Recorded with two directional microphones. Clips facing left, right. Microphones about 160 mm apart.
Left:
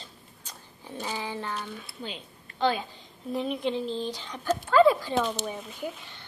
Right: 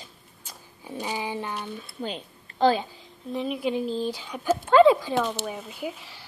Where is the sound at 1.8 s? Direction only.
45° right (ahead or behind).